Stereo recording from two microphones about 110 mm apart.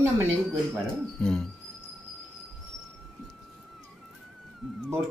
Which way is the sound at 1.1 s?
5° left (ahead or behind).